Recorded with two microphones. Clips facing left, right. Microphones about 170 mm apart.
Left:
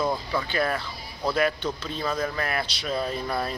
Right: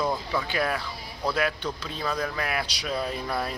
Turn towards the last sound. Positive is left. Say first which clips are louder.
# left 1 dB
turn(degrees=-5)  # may be behind; listen again after turning